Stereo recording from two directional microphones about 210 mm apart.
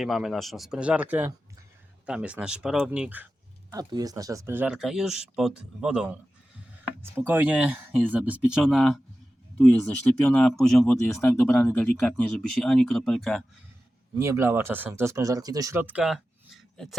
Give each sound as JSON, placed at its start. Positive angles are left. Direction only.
{"t": 0.0, "sound": "speech", "side_deg": 0}
{"t": 3.7, "sound": "speech", "side_deg": -20}
{"t": 7.2, "sound": "speech", "side_deg": -10}
{"t": 14.2, "sound": "speech", "side_deg": -15}